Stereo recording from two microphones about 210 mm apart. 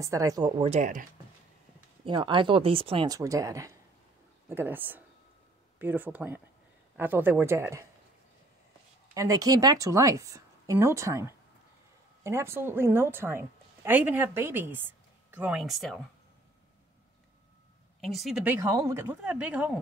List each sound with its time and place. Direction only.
0.0 s speech: 15° right (ahead or behind); by 1.0 s 35° right (ahead or behind)
2.0 s a woman's voice: 25° right (ahead or behind)
9.1 s a woman's voice: 15° right (ahead or behind); by 16.0 s centre (ahead or behind)
18.0 s a woman's voice: centre (ahead or behind)